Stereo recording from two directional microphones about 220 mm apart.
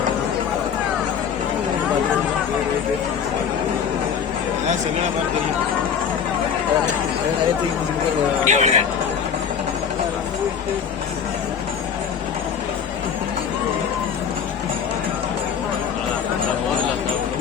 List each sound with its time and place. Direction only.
8.4 s speech: 30° right (ahead or behind)